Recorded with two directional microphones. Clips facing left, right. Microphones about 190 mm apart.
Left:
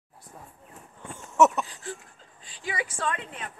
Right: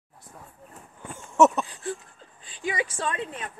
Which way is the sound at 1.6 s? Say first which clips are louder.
Right 3 dB; 30° right (ahead or behind).